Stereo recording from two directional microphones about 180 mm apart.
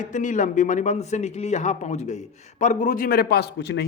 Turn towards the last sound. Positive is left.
turn(degrees=70)  # may be behind; listen again after turning